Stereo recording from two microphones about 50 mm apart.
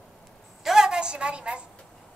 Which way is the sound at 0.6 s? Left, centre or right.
Centre.